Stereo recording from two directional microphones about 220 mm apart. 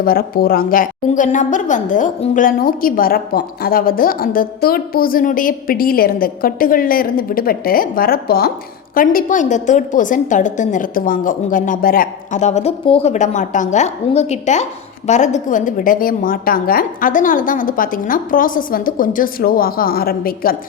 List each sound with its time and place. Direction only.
0.0 s a woman's voice: 40° left (ahead or behind)